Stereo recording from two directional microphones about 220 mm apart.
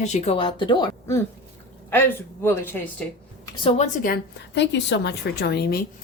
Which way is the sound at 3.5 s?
25° left (ahead or behind).